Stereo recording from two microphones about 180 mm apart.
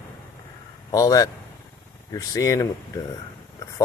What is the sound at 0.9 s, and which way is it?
Speech, 20° left (ahead or behind).